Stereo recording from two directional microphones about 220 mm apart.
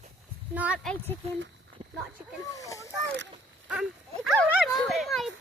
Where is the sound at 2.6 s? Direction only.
15° left (ahead or behind).